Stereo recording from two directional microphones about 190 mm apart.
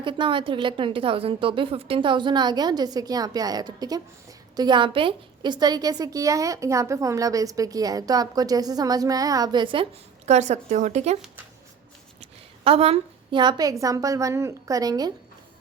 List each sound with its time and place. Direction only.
0.0 s a woman's voice: 25° right (ahead or behind)
10.2 s speech: 35° right (ahead or behind)
12.2 s a sound: 30° right (ahead or behind)
13.8 s a woman's voice: 15° right (ahead or behind)